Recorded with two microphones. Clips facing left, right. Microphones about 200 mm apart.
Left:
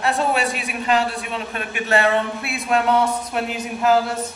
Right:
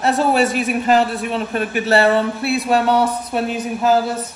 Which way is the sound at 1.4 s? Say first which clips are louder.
Right 7 dB; 40° right (ahead or behind).